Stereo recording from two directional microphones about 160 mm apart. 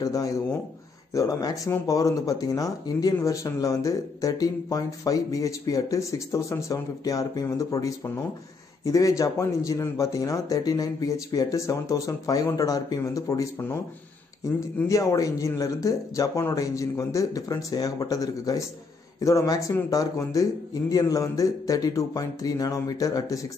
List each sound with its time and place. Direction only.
0.0 s speech: 20° left (ahead or behind)